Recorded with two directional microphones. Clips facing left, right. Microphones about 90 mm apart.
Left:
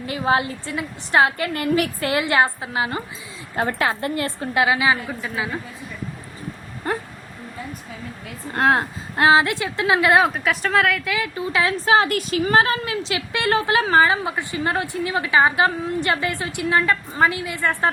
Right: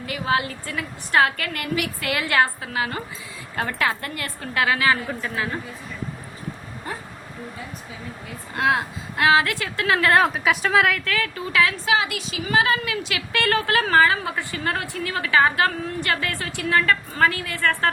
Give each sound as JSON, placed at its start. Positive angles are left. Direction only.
{"t": 0.0, "sound": "a woman's voice", "side_deg": 25}
{"t": 6.8, "sound": "a sound", "side_deg": 55}
{"t": 8.5, "sound": "a woman's voice", "side_deg": 40}
{"t": 9.2, "sound": "a woman's voice", "side_deg": 25}
{"t": 10.2, "sound": "speech", "side_deg": 0}
{"t": 11.0, "sound": "a woman's voice", "side_deg": 15}
{"t": 11.9, "sound": "a woman's voice", "side_deg": 45}